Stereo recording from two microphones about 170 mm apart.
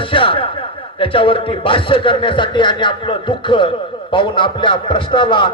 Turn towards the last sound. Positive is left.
turn(degrees=30)  # may be behind; listen again after turning